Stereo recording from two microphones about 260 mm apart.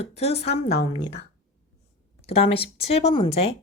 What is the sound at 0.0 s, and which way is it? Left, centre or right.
Speech, left.